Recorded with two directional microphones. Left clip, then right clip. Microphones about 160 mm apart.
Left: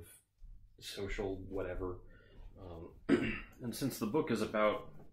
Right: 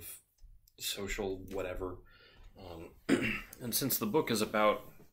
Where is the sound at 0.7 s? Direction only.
15° right (ahead or behind).